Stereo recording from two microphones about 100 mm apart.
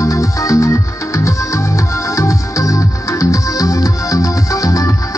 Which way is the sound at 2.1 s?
35° left (ahead or behind).